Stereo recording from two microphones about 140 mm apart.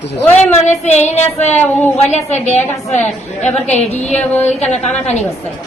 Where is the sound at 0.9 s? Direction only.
50° left (ahead or behind).